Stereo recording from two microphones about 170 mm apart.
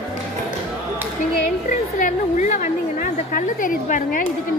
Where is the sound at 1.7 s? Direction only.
50° left (ahead or behind).